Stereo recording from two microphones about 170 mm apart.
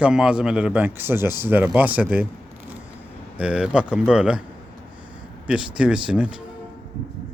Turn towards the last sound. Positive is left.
turn(degrees=-5)  # may be behind; listen again after turning